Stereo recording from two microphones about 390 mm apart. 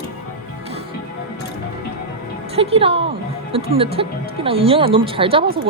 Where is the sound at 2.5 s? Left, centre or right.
Centre.